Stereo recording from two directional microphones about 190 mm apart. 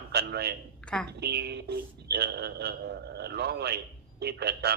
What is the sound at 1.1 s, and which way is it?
Speech, 60° right (ahead or behind).